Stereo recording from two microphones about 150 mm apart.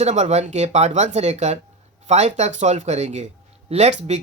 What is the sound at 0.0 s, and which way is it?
Speech, 45° right (ahead or behind).